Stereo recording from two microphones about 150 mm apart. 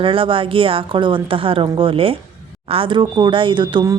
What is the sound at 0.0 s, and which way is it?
A woman's voice, 35° right (ahead or behind).